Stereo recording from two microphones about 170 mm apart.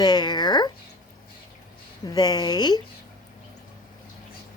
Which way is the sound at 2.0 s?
25° left (ahead or behind).